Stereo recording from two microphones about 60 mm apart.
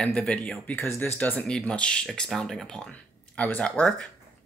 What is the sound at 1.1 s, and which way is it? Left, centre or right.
Speech, left.